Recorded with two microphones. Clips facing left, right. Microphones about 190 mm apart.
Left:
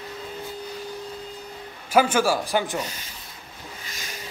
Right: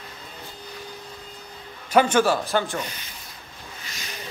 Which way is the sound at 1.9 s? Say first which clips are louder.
Right 1 dB; 5° left (ahead or behind).